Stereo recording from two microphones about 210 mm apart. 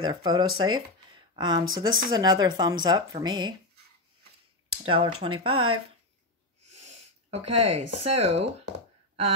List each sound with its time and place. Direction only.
0.0 s a woman's voice: 20° right (ahead or behind)
4.8 s a woman's voice: 25° right (ahead or behind)